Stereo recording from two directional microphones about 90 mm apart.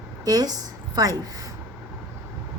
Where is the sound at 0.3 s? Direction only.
45° right (ahead or behind).